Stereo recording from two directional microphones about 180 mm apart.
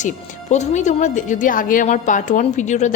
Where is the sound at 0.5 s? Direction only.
40° left (ahead or behind).